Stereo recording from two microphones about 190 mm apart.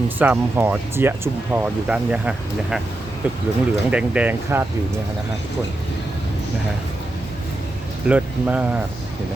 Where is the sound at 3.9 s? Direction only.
5° right (ahead or behind).